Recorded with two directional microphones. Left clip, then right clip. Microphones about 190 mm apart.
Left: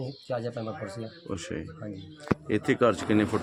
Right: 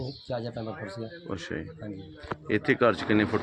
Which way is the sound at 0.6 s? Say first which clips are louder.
Left 1 dB; 10° left (ahead or behind).